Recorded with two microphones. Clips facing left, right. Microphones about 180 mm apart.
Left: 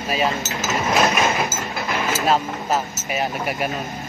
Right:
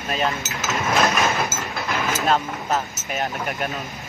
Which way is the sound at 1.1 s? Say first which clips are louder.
Left 1 dB; 10° left (ahead or behind).